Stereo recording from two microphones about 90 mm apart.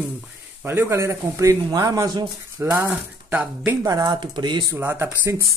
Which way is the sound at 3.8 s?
45° right (ahead or behind).